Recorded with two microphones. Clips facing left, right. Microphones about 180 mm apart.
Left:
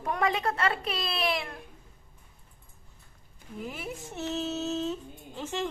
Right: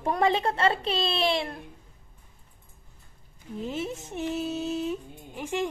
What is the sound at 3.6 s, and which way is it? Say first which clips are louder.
Speech: right 5 dB; 25° right (ahead or behind).